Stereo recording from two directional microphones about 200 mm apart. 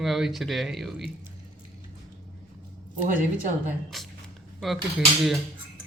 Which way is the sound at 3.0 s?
40° right (ahead or behind).